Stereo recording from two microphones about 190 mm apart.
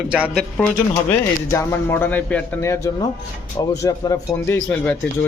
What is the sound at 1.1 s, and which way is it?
A man's voice, 15° left (ahead or behind).